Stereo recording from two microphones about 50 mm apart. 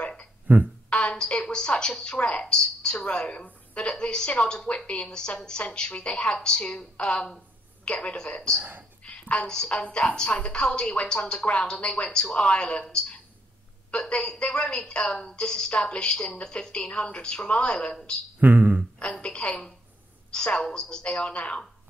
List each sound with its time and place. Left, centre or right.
0.5 s speech: right
0.9 s a woman's voice: centre
9.0 s a sound: left
9.5 s a woman's voice: centre
9.8 s a woman's voice: left
14.0 s a woman's voice: centre
18.4 s a sound: right
19.0 s a woman's voice: left
19.4 s a sound: left
20.2 s a woman's voice: centre